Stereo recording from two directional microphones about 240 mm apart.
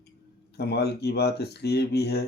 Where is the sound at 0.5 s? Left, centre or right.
Left.